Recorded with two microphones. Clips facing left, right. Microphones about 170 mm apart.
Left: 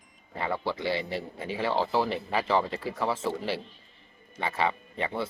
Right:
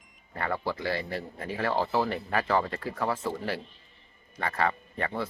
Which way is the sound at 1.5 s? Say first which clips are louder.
Left 1 dB; 5° left (ahead or behind).